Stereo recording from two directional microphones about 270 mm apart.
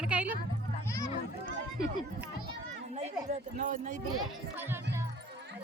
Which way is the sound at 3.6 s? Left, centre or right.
Right.